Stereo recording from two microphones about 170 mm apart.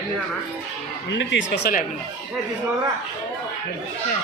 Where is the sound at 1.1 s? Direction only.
90° left.